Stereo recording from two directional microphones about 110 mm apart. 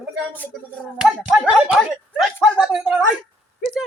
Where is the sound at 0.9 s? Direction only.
5° right (ahead or behind).